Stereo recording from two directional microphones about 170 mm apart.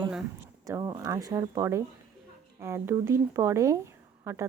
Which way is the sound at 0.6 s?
20° right (ahead or behind).